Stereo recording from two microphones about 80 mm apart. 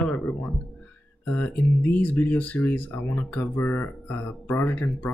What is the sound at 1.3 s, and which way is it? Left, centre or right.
Speech, left.